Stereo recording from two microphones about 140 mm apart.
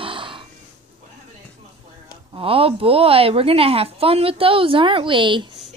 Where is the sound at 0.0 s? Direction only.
40° right (ahead or behind).